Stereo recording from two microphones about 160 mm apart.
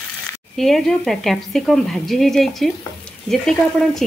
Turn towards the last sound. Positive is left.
turn(degrees=0)  # may be behind; listen again after turning